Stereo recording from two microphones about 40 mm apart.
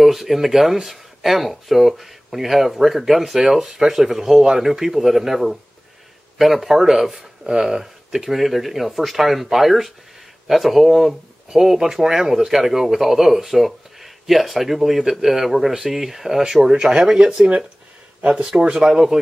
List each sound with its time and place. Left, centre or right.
0.0 s speech: centre
18.6 s speech: centre